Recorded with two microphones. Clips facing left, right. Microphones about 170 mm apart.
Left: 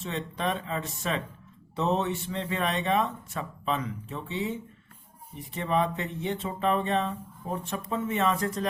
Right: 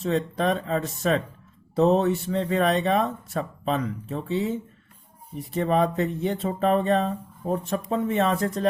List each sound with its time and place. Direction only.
0.0 s speech: 40° right (ahead or behind)
5.6 s speech: 40° right (ahead or behind)